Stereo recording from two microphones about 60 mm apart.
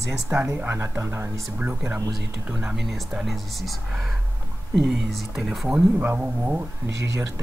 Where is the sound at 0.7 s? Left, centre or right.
Right.